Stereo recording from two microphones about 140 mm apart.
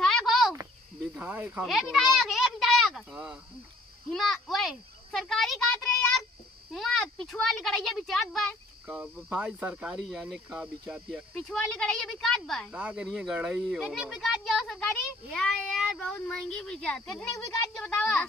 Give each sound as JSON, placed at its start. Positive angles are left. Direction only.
{"t": 0.0, "sound": "a sound", "side_deg": 0}
{"t": 1.1, "sound": "speech", "side_deg": -15}
{"t": 4.1, "sound": "insect", "side_deg": 0}
{"t": 6.7, "sound": "speech", "side_deg": 0}
{"t": 9.0, "sound": "speech", "side_deg": -10}
{"t": 10.0, "sound": "speech", "side_deg": 0}
{"t": 17.3, "sound": "speech", "side_deg": 25}
{"t": 17.7, "sound": "a woman's voice", "side_deg": 5}